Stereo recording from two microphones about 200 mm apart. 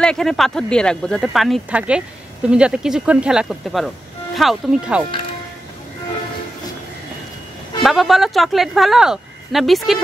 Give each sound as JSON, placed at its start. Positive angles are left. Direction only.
{"t": 0.0, "sound": "speech", "side_deg": 5}
{"t": 7.8, "sound": "speech", "side_deg": 0}